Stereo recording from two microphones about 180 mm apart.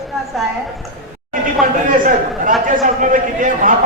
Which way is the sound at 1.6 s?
50° right (ahead or behind).